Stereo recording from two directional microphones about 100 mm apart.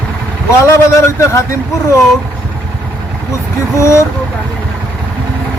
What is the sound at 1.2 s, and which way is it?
Speech, 30° left (ahead or behind).